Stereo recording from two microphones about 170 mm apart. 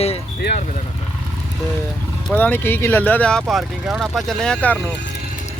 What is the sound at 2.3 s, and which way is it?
Speech, 10° left (ahead or behind).